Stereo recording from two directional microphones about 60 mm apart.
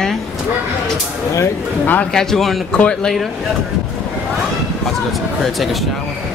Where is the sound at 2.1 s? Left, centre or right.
Centre.